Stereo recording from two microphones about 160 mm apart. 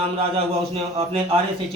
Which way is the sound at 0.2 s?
35° right (ahead or behind).